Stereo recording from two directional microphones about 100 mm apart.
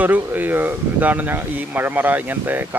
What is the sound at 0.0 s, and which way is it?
Speech, 15° right (ahead or behind).